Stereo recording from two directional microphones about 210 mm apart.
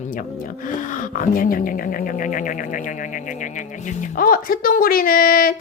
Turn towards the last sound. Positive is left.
turn(degrees=45)  # may be behind; listen again after turning